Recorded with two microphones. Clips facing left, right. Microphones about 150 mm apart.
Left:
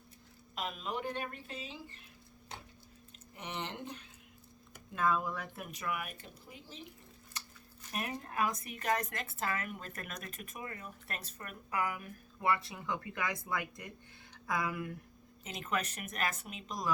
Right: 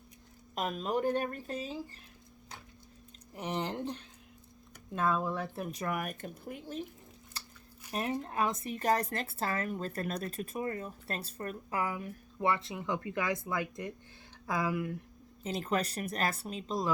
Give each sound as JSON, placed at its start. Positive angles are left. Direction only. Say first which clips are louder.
{"t": 0.5, "sound": "speech", "louder": "right 6 dB", "side_deg": -45}
{"t": 3.3, "sound": "speech", "louder": "right 7 dB", "side_deg": -35}
{"t": 4.9, "sound": "speech", "louder": "right 2 dB", "side_deg": -30}
{"t": 7.9, "sound": "speech", "louder": "right 4 dB", "side_deg": -30}